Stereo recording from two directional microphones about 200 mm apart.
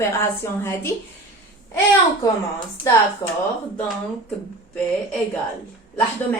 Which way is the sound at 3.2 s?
20° left (ahead or behind).